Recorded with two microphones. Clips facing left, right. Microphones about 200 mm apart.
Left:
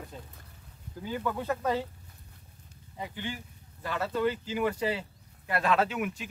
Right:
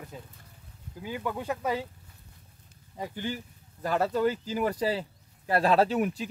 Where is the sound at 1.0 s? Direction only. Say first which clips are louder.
Left 1 dB; 15° right (ahead or behind).